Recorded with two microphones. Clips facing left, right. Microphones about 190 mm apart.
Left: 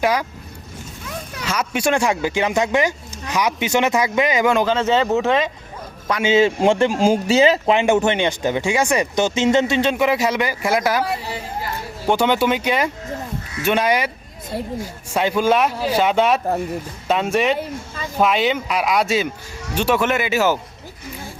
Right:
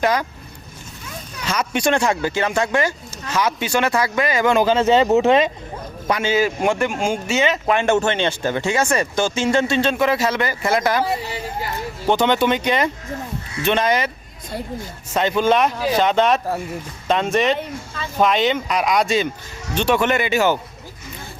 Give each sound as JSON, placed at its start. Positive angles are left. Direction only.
{"t": 0.0, "sound": "speech", "side_deg": 10}
{"t": 1.5, "sound": "speech", "side_deg": 5}
{"t": 4.6, "sound": "speech", "side_deg": -10}
{"t": 6.2, "sound": "speech", "side_deg": 25}
{"t": 7.7, "sound": "speech", "side_deg": 15}
{"t": 12.0, "sound": "speech", "side_deg": 10}